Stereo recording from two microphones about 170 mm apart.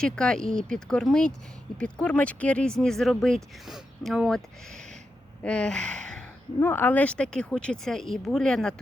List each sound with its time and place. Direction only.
0.0 s speech: 5° left (ahead or behind)
5.4 s speech: 5° left (ahead or behind)